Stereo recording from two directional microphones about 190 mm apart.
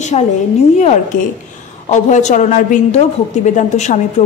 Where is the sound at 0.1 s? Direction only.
35° left (ahead or behind).